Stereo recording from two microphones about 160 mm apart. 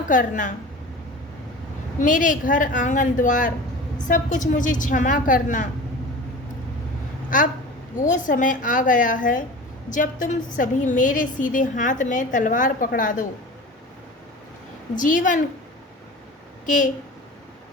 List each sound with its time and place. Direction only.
0.1 s a woman's voice: 55° left (ahead or behind)
2.0 s a woman's voice: 55° left (ahead or behind)
7.3 s a woman's voice: 55° left (ahead or behind)
14.9 s a woman's voice: 55° left (ahead or behind)
16.6 s a woman's voice: 55° left (ahead or behind)